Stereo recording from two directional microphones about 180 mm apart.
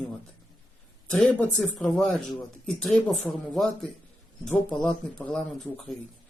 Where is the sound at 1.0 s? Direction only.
5° left (ahead or behind).